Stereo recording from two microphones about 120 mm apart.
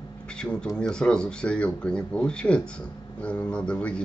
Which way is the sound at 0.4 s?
5° left (ahead or behind).